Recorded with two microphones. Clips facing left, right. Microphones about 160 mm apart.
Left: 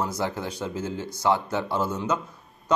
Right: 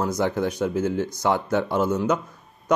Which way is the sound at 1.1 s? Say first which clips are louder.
Left 2 dB; 15° right (ahead or behind).